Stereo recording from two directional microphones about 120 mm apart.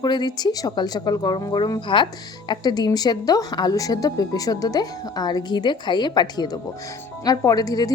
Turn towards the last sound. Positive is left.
turn(degrees=30)  # may be behind; listen again after turning